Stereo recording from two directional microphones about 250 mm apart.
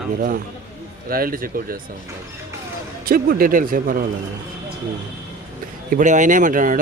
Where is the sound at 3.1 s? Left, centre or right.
Right.